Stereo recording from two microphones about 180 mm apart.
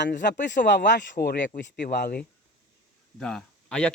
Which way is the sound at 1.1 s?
60° left (ahead or behind).